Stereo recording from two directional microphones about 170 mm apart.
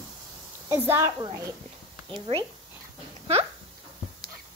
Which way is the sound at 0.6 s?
15° right (ahead or behind).